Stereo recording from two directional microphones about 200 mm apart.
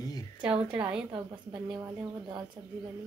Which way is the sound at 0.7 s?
5° right (ahead or behind).